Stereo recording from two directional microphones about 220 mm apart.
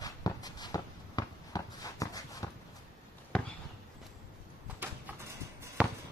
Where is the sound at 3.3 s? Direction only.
5° left (ahead or behind).